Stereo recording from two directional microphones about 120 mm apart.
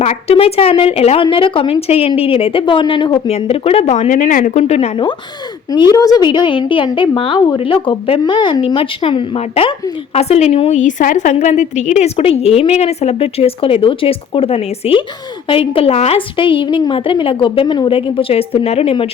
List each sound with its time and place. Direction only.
0.0 s a woman's voice: 60° left (ahead or behind); by 3.2 s 40° left (ahead or behind)
3.2 s a woman's voice: 60° left (ahead or behind)
5.7 s a woman's voice: 35° left (ahead or behind)
10.2 s a woman's voice: 60° left (ahead or behind)